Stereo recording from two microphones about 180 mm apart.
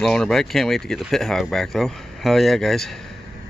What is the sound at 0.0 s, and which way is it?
Speech, 5° left (ahead or behind).